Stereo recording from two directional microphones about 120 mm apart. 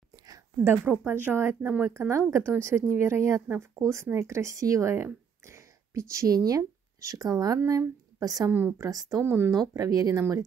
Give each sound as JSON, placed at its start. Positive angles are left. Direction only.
{"t": 0.1, "sound": "a sound", "side_deg": -30}
{"t": 0.8, "sound": "speech", "side_deg": -15}
{"t": 8.5, "sound": "speech", "side_deg": -20}